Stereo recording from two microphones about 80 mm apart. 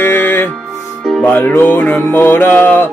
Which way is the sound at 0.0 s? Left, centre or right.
Left.